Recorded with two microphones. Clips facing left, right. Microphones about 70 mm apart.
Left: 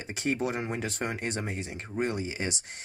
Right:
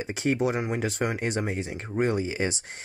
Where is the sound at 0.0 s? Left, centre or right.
Right.